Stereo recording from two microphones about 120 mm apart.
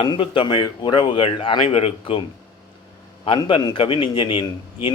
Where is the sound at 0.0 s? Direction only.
45° left (ahead or behind).